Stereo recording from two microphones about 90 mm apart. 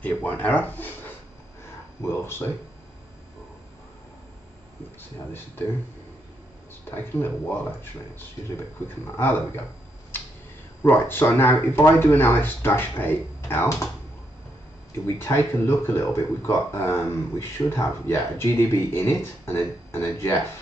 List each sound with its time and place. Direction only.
0.0 s speech: 20° left (ahead or behind)
7.2 s speech: 25° left (ahead or behind)
10.8 s speech: 25° left (ahead or behind)
15.0 s speech: 30° left (ahead or behind)